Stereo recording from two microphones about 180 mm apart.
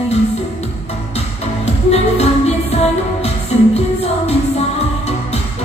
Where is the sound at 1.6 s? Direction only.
35° left (ahead or behind).